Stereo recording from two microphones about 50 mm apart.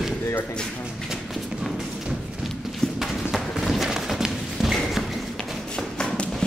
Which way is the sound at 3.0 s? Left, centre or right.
Centre.